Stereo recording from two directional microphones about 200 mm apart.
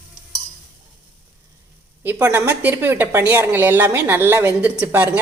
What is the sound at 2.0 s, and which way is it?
A woman's voice, 10° right (ahead or behind).